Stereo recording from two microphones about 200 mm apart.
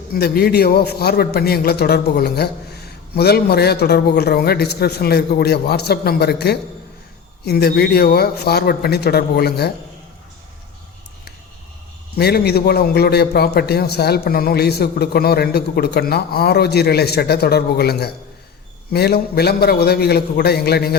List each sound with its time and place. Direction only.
0.1 s a man's voice: 50° left (ahead or behind)
12.1 s a man's voice: 55° left (ahead or behind)